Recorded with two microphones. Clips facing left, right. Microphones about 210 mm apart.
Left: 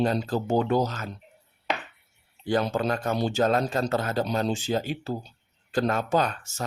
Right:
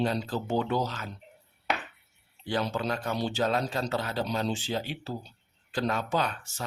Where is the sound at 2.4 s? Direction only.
45° left (ahead or behind).